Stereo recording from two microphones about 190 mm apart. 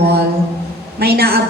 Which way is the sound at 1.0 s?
55° right (ahead or behind).